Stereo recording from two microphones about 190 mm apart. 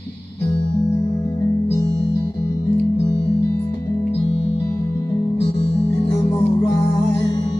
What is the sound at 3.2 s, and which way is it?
Music, 15° left (ahead or behind).